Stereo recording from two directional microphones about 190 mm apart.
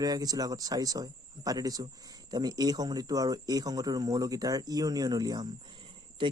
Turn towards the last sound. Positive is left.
turn(degrees=-25)  # may be behind; listen again after turning